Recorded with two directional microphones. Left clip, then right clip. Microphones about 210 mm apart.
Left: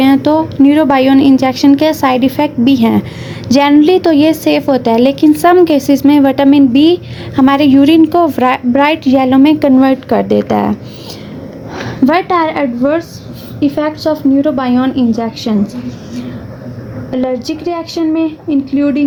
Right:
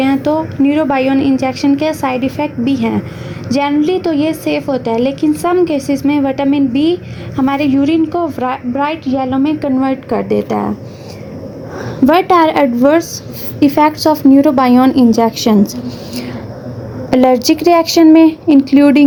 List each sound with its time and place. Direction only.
0.0 s a woman's voice: 20° left (ahead or behind)
12.3 s a woman's voice: 10° right (ahead or behind)
17.1 s speech: 35° right (ahead or behind)